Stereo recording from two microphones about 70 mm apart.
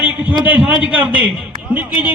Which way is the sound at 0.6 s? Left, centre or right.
Right.